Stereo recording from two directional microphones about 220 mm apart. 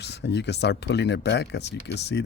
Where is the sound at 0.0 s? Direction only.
50° left (ahead or behind).